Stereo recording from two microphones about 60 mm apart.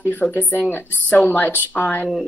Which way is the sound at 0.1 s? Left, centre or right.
Left.